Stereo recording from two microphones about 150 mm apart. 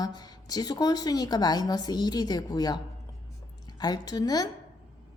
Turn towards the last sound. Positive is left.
turn(degrees=25)  # may be behind; listen again after turning